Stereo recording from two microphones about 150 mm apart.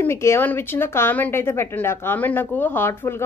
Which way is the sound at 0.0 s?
15° left (ahead or behind).